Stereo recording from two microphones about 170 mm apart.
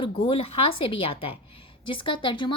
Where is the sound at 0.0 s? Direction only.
35° left (ahead or behind).